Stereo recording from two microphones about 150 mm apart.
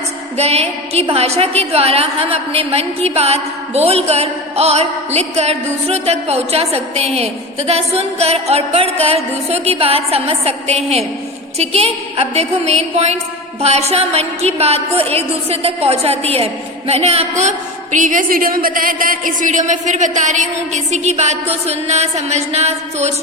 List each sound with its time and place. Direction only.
0.3 s a woman's voice: 45° right (ahead or behind)
17.9 s a woman's voice: 60° right (ahead or behind)